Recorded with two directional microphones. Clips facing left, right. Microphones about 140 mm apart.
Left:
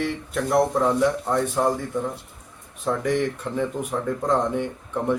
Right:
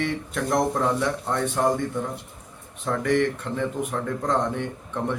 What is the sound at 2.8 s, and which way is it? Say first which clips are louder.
Speech: right 1 dB; 10° left (ahead or behind).